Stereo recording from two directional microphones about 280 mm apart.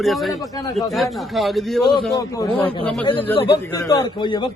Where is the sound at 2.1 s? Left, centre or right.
Centre.